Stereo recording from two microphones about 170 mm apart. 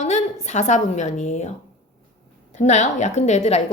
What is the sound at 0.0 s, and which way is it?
A woman's voice, 45° left (ahead or behind).